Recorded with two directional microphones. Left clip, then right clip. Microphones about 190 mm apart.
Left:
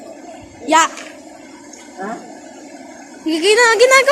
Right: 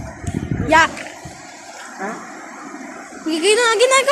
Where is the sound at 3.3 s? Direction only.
30° left (ahead or behind).